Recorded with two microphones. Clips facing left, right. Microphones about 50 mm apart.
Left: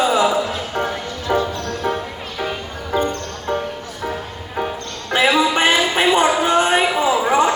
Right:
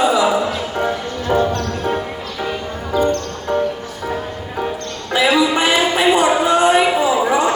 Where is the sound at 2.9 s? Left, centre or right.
Left.